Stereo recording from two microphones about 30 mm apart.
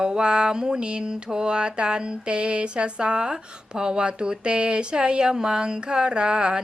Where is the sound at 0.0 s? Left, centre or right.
Right.